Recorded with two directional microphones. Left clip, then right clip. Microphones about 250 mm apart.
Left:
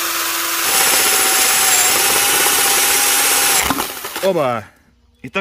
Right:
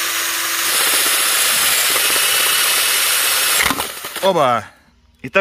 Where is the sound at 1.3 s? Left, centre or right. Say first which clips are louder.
Left 1 dB; left.